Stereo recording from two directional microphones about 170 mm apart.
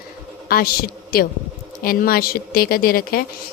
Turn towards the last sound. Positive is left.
turn(degrees=60)  # may be behind; listen again after turning